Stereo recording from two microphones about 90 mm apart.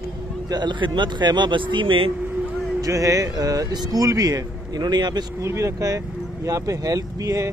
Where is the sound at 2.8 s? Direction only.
40° right (ahead or behind).